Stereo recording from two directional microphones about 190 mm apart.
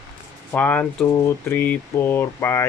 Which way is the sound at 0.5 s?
10° left (ahead or behind).